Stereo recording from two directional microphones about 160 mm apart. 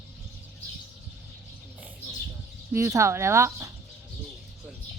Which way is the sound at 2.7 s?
15° right (ahead or behind).